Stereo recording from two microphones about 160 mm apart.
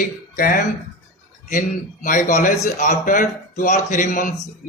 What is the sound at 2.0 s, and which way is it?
Speech, 55° left (ahead or behind).